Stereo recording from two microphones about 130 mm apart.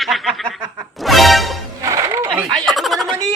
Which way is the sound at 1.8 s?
25° right (ahead or behind).